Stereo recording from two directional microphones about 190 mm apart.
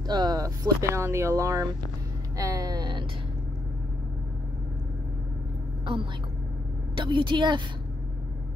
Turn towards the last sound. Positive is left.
turn(degrees=-25)  # may be behind; listen again after turning